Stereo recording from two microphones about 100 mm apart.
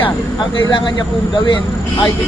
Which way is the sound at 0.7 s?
50° left (ahead or behind).